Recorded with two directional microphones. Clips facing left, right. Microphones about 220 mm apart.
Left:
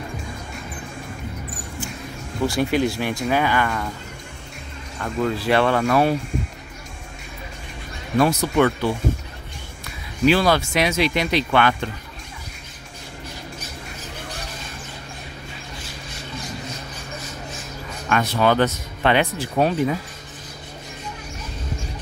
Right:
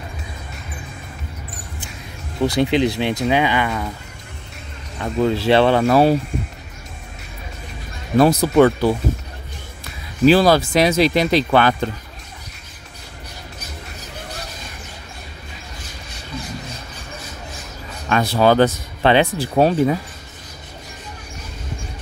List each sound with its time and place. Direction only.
2.4 s speech: 20° right (ahead or behind)
4.9 s speech: 25° right (ahead or behind)
8.2 s speech: 35° right (ahead or behind)
10.2 s speech: 35° right (ahead or behind)
18.1 s speech: 35° right (ahead or behind)